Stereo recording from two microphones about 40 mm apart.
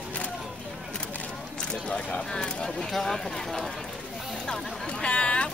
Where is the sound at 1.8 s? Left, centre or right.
Left.